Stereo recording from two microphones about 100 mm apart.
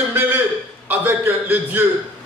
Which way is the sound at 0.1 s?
20° right (ahead or behind).